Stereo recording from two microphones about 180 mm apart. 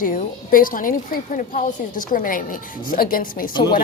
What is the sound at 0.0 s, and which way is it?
A woman's voice, 50° left (ahead or behind).